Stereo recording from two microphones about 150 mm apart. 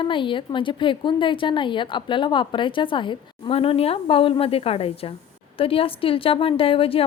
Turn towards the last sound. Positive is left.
turn(degrees=40)  # may be behind; listen again after turning